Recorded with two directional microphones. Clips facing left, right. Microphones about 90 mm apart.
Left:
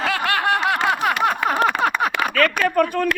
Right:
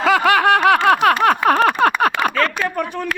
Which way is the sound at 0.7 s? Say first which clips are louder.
Right 7 dB; 65° right (ahead or behind).